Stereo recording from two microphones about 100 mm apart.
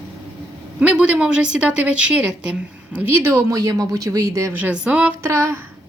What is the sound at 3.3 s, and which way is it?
Speech, 35° right (ahead or behind).